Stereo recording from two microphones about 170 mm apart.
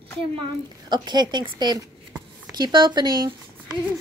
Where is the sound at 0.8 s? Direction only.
25° right (ahead or behind).